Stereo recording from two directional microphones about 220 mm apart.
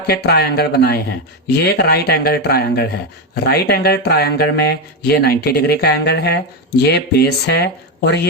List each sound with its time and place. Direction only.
0.2 s speech: 45° left (ahead or behind)